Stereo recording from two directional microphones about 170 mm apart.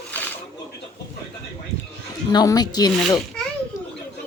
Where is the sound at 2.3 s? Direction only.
20° left (ahead or behind).